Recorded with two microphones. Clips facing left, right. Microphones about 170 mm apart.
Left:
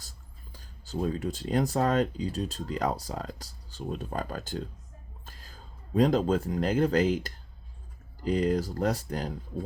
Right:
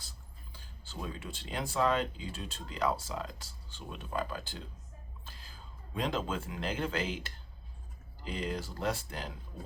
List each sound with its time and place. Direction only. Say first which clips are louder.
0.5 s speech: left 11 dB; 40° left (ahead or behind)